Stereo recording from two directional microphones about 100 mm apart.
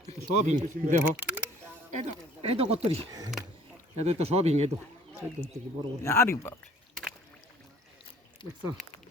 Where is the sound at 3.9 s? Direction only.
90° right.